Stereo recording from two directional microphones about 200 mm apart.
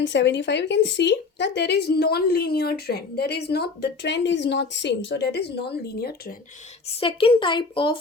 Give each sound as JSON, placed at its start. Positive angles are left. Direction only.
{"t": 0.0, "sound": "a woman's voice", "side_deg": 65}
{"t": 6.8, "sound": "a woman's voice", "side_deg": 25}